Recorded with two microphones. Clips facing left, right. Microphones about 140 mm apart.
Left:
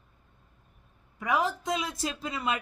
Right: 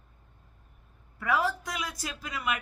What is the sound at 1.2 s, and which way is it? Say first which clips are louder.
A woman's voice: even; 15° left (ahead or behind).